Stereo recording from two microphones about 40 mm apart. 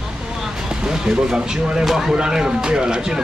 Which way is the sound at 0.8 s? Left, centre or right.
Centre.